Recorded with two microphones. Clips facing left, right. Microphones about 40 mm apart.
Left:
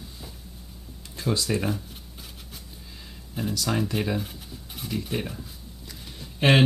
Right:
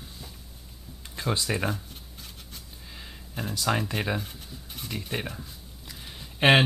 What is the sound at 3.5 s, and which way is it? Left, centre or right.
Speech, centre.